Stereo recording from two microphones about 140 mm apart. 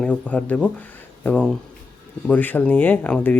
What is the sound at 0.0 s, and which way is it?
Speech, 10° left (ahead or behind).